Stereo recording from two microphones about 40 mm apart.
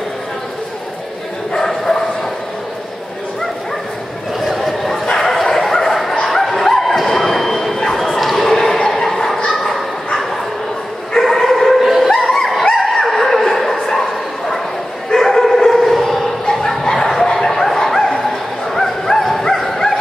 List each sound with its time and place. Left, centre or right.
1.5 s bow-wow: centre
4.6 s bow-wow: centre
5.0 s bow-wow: centre
5.3 s dog: centre
6.2 s bow-wow: centre
8.8 s chuckle: centre
9.5 s bow-wow: centre
11.1 s dog: centre
12.1 s snicker: centre
12.9 s a sound: centre
15.1 s dog: centre
16.4 s dog: centre
18.8 s bow-wow: centre